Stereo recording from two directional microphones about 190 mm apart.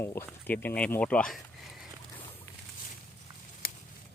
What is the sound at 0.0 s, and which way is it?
Speech, 10° left (ahead or behind).